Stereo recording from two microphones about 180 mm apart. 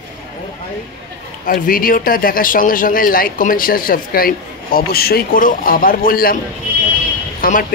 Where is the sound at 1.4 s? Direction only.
50° left (ahead or behind).